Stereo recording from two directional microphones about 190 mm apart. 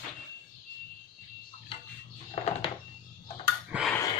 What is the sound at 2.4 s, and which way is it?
Music, 30° left (ahead or behind).